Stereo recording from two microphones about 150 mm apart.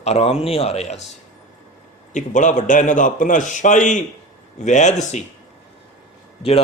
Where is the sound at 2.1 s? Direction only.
55° left (ahead or behind).